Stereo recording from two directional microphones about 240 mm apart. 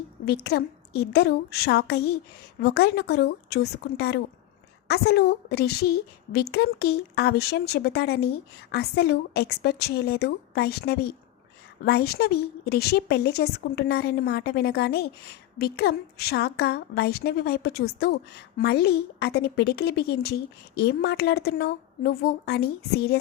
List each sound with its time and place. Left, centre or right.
0.4 s a woman's voice: left